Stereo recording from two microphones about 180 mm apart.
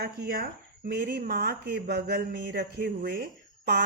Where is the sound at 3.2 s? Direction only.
60° right (ahead or behind).